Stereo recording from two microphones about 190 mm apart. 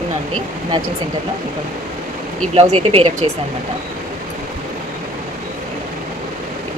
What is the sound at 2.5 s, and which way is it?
Speech, 30° right (ahead or behind).